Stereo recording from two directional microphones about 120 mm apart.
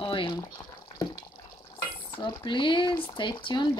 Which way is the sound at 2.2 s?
40° left (ahead or behind).